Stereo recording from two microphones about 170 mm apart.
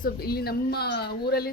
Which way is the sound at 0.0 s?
65° left (ahead or behind).